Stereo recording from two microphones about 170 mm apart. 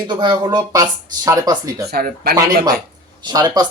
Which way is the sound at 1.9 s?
60° right (ahead or behind).